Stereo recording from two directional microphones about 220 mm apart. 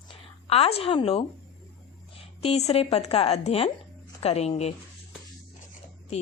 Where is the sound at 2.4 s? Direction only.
30° left (ahead or behind).